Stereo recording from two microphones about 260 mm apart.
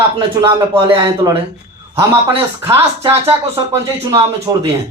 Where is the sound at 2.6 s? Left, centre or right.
Centre.